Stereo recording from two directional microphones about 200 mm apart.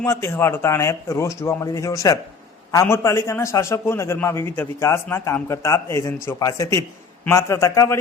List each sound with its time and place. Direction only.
0.0 s a man's voice: 15° left (ahead or behind)